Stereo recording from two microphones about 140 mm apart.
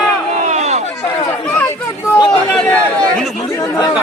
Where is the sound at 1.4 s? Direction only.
15° left (ahead or behind).